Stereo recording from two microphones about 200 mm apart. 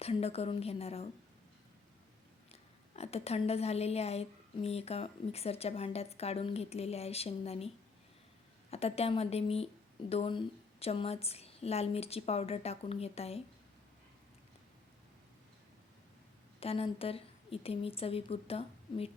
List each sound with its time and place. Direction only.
0.0 s a woman's voice: 30° left (ahead or behind)
2.5 s a woman's voice: 30° left (ahead or behind)
8.7 s a woman's voice: 30° left (ahead or behind)
16.6 s speech: 30° left (ahead or behind)